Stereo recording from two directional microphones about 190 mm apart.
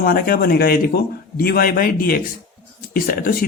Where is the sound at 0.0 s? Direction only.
50° left (ahead or behind).